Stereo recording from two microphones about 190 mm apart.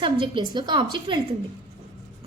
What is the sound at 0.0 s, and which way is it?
A woman's voice, 25° right (ahead or behind).